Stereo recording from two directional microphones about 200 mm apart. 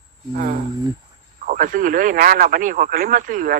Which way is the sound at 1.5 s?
40° right (ahead or behind).